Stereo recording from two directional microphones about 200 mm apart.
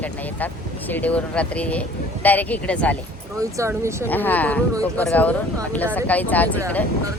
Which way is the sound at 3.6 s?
10° right (ahead or behind).